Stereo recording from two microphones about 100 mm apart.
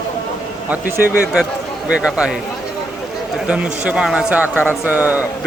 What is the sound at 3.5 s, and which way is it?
A man's voice, 10° right (ahead or behind).